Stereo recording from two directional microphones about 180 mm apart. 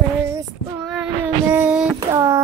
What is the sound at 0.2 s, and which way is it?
Child singing, 15° right (ahead or behind).